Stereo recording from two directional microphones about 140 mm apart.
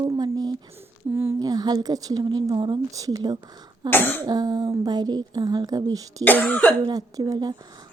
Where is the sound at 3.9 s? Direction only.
15° left (ahead or behind).